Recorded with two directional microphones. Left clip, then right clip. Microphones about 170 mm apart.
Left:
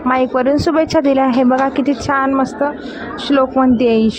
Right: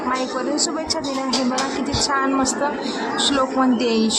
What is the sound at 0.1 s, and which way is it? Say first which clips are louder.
Speech: left 10 dB; 50° left (ahead or behind).